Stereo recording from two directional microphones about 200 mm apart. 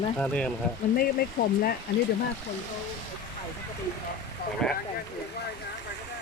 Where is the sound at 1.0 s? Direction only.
50° left (ahead or behind).